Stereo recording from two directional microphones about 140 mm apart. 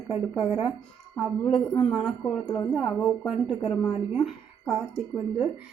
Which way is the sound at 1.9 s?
Centre (ahead or behind).